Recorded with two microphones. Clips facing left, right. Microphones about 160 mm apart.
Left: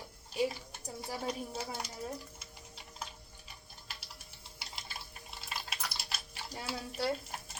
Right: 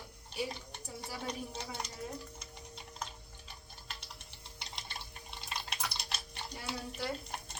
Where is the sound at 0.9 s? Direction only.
5° left (ahead or behind).